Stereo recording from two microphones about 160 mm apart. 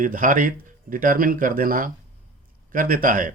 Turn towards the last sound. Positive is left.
turn(degrees=-55)  # may be behind; listen again after turning